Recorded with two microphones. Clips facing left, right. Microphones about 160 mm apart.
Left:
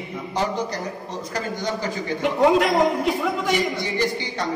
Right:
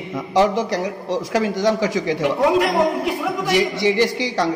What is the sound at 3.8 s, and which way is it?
Speech, 90° right.